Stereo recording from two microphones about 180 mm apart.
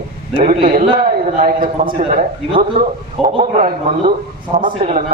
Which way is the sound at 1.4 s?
30° right (ahead or behind).